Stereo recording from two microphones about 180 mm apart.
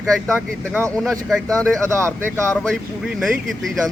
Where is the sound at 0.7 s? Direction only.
15° right (ahead or behind).